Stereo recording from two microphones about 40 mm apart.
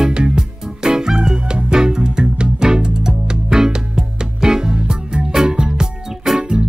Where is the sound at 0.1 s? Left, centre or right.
Right.